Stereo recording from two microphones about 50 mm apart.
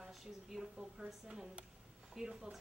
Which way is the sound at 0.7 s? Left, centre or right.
Centre.